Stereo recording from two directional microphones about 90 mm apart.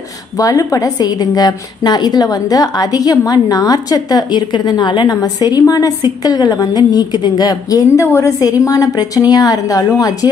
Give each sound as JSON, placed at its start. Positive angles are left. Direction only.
{"t": 0.4, "sound": "a woman's voice", "side_deg": 40}